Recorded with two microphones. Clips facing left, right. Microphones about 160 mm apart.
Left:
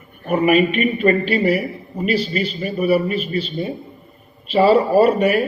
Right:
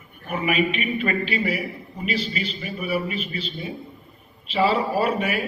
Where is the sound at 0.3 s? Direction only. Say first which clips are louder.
Left 8 dB; 45° left (ahead or behind).